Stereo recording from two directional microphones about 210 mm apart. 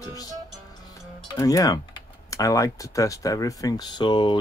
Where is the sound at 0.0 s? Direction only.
15° left (ahead or behind).